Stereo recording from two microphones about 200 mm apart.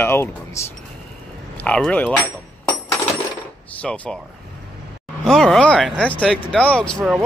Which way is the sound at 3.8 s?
5° left (ahead or behind).